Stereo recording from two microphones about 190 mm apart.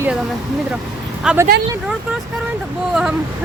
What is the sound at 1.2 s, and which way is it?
Speech, 5° right (ahead or behind).